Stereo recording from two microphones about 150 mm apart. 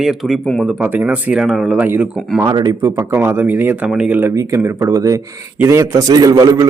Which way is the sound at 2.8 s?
15° right (ahead or behind).